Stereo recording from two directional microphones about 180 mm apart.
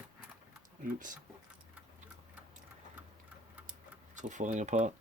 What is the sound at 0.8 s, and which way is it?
Speech, 45° right (ahead or behind).